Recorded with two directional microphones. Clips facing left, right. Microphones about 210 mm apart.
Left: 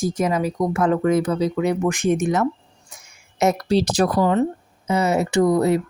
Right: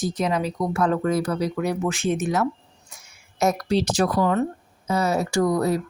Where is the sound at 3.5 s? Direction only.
35° left (ahead or behind).